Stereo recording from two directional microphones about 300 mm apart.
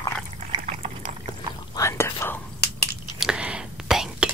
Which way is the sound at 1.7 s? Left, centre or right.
Centre.